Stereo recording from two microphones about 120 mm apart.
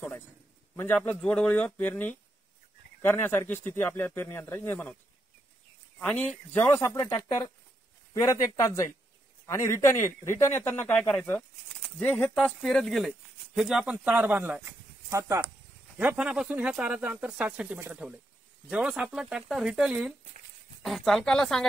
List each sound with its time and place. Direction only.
0.7 s speech: 15° left (ahead or behind)
5.9 s speech: 10° left (ahead or behind)
6.8 s a man's voice: 20° left (ahead or behind); by 15.4 s 25° right (ahead or behind)
16.0 s speech: 10° right (ahead or behind)